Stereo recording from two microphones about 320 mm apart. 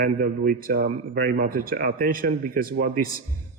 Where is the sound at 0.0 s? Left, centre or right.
Right.